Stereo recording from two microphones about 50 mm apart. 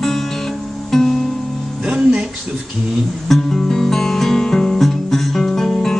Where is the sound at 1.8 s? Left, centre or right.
Centre.